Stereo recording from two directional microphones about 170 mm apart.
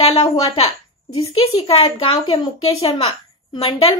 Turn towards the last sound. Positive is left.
turn(degrees=35)  # may be behind; listen again after turning